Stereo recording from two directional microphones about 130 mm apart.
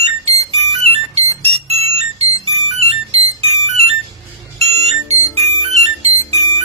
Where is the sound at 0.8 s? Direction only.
55° right (ahead or behind).